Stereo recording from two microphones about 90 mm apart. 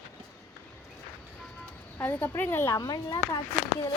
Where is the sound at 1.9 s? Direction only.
25° left (ahead or behind).